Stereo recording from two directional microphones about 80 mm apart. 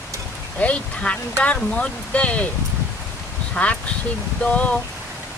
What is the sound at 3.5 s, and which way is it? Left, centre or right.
Speech, centre.